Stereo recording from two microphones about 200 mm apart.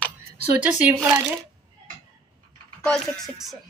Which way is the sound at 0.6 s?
5° right (ahead or behind).